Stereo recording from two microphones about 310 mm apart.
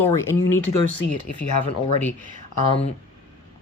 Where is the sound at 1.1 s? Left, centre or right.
Left.